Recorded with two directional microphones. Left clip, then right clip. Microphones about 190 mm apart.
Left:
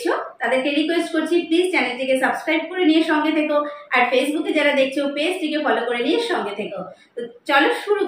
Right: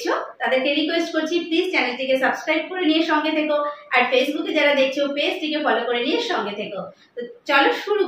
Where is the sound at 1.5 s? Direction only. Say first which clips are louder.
Left 2 dB; centre (ahead or behind).